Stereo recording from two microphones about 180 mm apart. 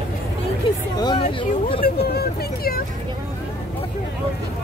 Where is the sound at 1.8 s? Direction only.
60° left (ahead or behind).